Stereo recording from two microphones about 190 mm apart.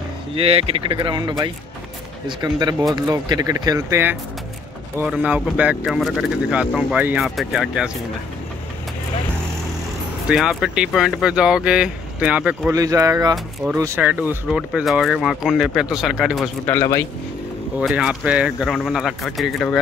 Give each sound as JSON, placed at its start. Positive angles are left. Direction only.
{"t": 0.3, "sound": "speech", "side_deg": -30}
{"t": 10.2, "sound": "speech", "side_deg": -5}
{"t": 12.7, "sound": "speech", "side_deg": -15}
{"t": 16.6, "sound": "speech", "side_deg": 15}
{"t": 17.7, "sound": "speech", "side_deg": -5}